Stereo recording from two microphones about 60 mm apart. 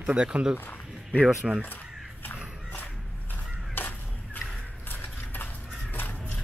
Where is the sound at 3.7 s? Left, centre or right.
Left.